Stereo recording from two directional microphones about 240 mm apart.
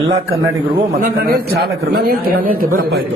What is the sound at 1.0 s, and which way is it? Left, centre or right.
A woman's voice, right.